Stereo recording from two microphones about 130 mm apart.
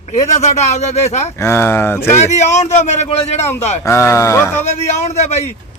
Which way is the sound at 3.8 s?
20° left (ahead or behind).